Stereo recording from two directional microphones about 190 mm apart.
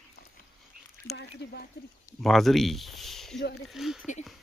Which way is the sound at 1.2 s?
60° left (ahead or behind).